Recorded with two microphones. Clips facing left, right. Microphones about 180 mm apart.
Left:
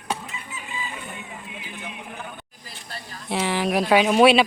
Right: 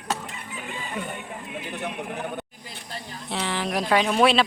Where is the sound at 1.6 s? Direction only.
65° right (ahead or behind).